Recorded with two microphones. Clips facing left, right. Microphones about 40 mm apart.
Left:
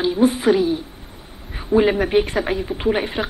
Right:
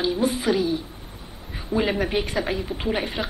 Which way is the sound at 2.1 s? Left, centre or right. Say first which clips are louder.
Left 6 dB; left.